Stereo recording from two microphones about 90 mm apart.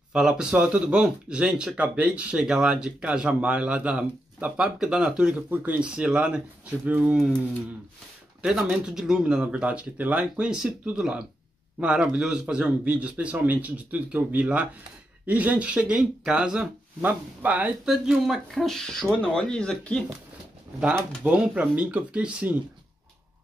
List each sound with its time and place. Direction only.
0.1 s speech: 5° right (ahead or behind)
8.4 s speech: 10° right (ahead or behind)
17.8 s speech: 5° right (ahead or behind)
21.2 s speech: 15° right (ahead or behind)